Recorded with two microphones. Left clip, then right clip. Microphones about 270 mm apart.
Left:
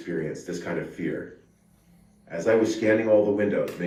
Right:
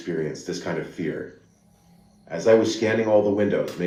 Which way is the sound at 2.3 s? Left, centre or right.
Right.